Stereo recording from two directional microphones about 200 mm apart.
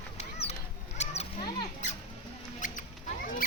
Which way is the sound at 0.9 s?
30° left (ahead or behind).